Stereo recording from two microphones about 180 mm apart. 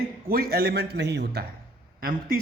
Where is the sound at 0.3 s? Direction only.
55° right (ahead or behind).